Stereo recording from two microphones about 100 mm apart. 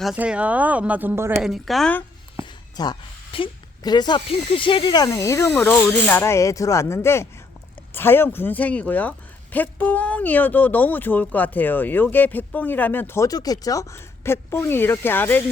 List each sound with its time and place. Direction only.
0.2 s speech: 15° right (ahead or behind)
1.4 s a woman's voice: 5° right (ahead or behind)
2.4 s a sound: 45° left (ahead or behind)
3.3 s a woman's voice: 65° left (ahead or behind)
3.8 s speech: 45° left (ahead or behind)
4.3 s speech: 60° left (ahead or behind)
5.0 s speech: 30° left (ahead or behind)
13.2 s speech: 40° left (ahead or behind); by 15.4 s 20° left (ahead or behind)